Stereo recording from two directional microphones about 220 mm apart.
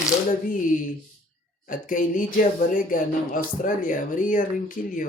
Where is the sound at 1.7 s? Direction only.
40° left (ahead or behind).